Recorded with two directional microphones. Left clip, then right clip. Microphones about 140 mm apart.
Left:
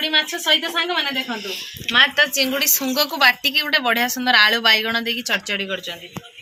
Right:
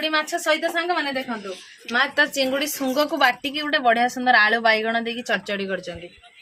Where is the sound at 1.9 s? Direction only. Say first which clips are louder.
Left 5 dB; 65° right (ahead or behind).